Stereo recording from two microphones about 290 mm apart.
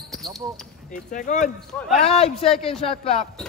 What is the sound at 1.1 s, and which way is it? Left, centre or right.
Speech, left.